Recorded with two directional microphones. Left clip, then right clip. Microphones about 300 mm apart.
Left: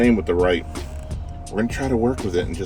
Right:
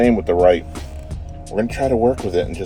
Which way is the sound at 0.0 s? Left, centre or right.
Right.